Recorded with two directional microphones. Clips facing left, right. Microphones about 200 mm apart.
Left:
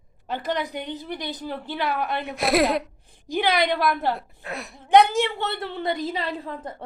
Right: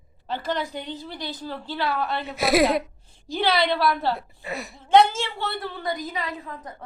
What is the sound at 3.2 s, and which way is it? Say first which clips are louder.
Speech: even; 15° left (ahead or behind).